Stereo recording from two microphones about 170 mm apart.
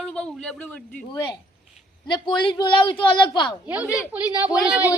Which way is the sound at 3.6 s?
5° right (ahead or behind).